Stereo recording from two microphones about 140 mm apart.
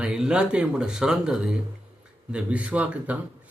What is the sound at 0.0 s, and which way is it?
Speech, 5° right (ahead or behind).